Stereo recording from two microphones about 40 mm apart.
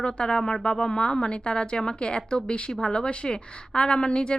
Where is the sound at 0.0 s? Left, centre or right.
Left.